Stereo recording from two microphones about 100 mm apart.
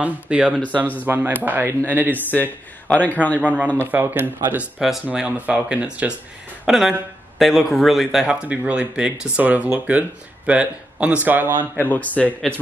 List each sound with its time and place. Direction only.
0.0 s speech: 10° right (ahead or behind)
2.1 s speech: 20° left (ahead or behind)
3.3 s speech: 15° right (ahead or behind)
4.7 s speech: 5° right (ahead or behind)
5.0 s speech: 15° right (ahead or behind)
11.8 s speech: 15° left (ahead or behind)